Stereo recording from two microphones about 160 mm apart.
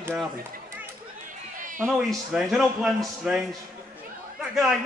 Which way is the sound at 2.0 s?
Centre (ahead or behind).